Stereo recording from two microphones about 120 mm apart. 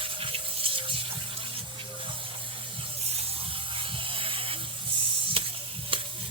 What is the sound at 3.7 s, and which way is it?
Electric toothbrush, 50° right (ahead or behind).